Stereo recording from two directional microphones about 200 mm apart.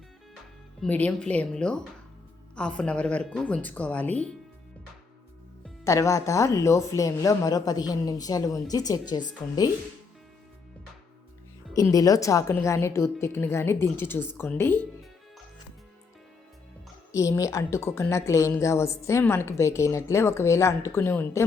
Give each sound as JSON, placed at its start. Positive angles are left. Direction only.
{"t": 0.8, "sound": "a woman's voice", "side_deg": 5}
{"t": 5.8, "sound": "a woman's voice", "side_deg": 15}
{"t": 11.7, "sound": "a woman's voice", "side_deg": 15}
{"t": 17.1, "sound": "a woman's voice", "side_deg": 15}